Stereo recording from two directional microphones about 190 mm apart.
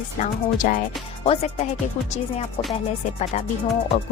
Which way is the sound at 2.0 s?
30° left (ahead or behind).